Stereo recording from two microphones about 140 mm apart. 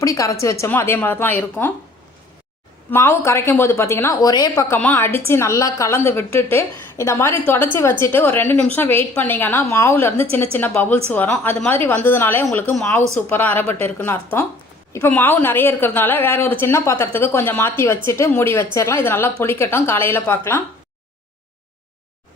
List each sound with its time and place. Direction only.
0.0 s a woman's voice: 25° left (ahead or behind)
2.9 s a woman's voice: 20° left (ahead or behind)